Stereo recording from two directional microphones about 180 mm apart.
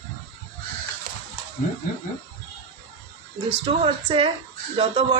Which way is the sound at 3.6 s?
30° right (ahead or behind).